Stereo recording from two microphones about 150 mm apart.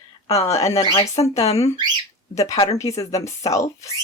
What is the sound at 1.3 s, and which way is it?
Speech, 45° left (ahead or behind).